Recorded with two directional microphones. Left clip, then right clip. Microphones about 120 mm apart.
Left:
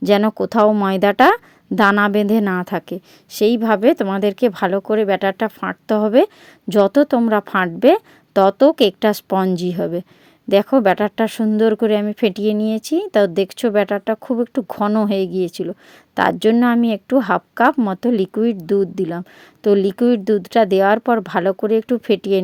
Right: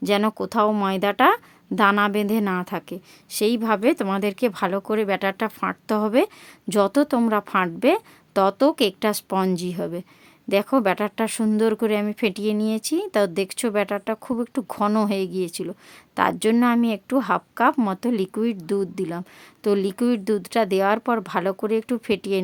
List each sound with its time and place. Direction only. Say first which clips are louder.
0.2 s a woman's voice: left 6 dB; 30° left (ahead or behind)
15.1 s a woman's voice: left 6 dB; 30° left (ahead or behind)